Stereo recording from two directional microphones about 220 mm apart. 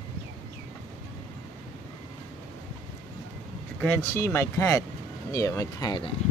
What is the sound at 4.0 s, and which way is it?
Speech, 15° left (ahead or behind).